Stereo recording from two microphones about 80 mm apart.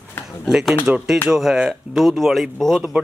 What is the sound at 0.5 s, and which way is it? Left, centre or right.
A man's voice, centre.